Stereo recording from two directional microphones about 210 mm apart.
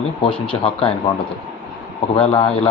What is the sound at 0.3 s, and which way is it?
Speech, 25° left (ahead or behind).